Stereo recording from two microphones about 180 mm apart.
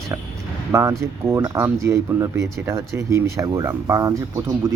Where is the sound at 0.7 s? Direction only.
15° right (ahead or behind).